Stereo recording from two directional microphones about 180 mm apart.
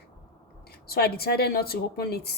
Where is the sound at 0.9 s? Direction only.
60° left (ahead or behind).